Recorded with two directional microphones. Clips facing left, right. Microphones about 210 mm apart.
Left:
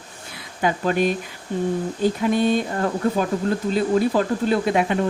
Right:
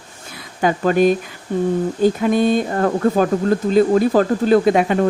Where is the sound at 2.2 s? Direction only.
45° right (ahead or behind).